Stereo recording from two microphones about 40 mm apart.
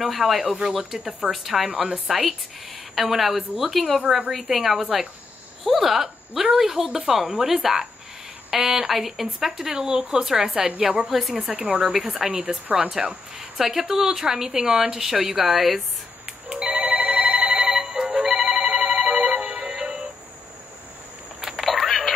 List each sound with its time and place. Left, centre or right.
0.0 s speech: centre
16.4 s telephone bell ringing: right
16.8 s telephone bell ringing: right
17.6 s music: centre
21.4 s a sound: centre